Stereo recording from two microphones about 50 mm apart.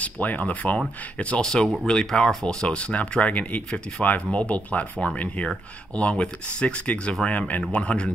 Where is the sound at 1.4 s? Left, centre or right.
Centre.